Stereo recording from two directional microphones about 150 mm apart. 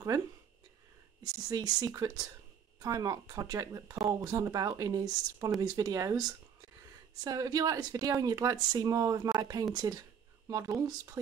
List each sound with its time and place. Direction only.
1.2 s speech: 25° right (ahead or behind)
7.2 s speech: 25° right (ahead or behind)